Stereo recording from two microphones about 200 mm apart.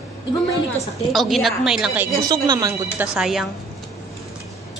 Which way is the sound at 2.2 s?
20° right (ahead or behind).